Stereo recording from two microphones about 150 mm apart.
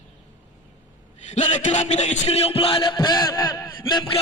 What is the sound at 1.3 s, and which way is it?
Music, 50° left (ahead or behind).